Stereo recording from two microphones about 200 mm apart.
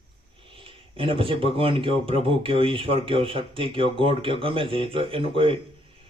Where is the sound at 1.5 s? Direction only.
25° right (ahead or behind).